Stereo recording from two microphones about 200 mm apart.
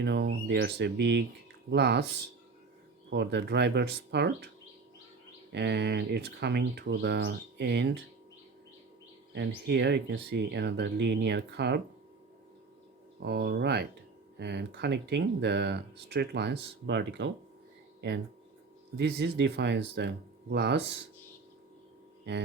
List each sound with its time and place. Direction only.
0.0 s speech: 60° right (ahead or behind)
3.1 s speech: 60° right (ahead or behind)
5.5 s speech: 55° right (ahead or behind)
9.6 s speech: 60° right (ahead or behind)
13.1 s speech: 55° right (ahead or behind)
18.9 s speech: 60° right (ahead or behind)